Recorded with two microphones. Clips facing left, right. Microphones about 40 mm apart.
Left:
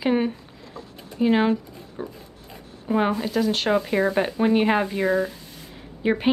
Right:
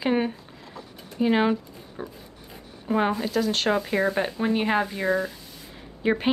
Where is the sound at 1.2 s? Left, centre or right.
Centre.